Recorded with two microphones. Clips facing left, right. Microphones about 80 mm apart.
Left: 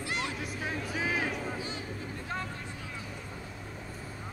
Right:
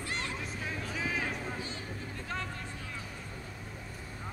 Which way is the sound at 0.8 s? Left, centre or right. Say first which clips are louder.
Left 3 dB; centre.